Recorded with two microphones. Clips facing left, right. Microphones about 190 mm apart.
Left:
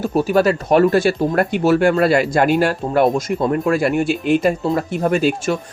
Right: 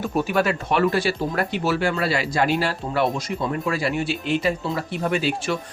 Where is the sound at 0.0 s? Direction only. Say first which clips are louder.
Left 6 dB; 35° left (ahead or behind).